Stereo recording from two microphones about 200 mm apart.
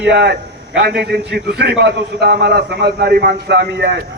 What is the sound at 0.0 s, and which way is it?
A man's voice, 55° right (ahead or behind).